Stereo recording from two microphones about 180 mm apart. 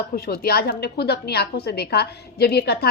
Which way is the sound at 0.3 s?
60° left (ahead or behind).